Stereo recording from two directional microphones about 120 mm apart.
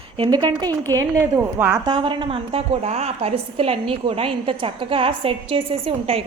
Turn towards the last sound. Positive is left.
turn(degrees=-50)  # may be behind; listen again after turning